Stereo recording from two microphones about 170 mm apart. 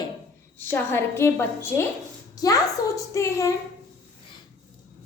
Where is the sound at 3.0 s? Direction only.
20° left (ahead or behind).